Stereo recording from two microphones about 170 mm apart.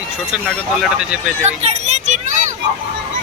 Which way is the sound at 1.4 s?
40° right (ahead or behind).